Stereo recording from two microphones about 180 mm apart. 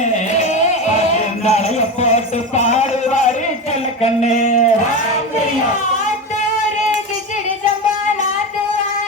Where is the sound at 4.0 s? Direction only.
35° left (ahead or behind).